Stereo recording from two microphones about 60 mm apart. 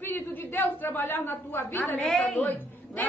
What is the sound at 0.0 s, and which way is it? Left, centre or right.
A woman's voice, left.